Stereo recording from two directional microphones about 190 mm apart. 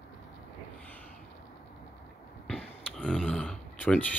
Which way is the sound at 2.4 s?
5° left (ahead or behind).